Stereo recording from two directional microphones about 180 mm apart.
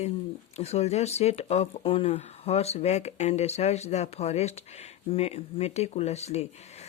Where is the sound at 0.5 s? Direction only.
35° left (ahead or behind).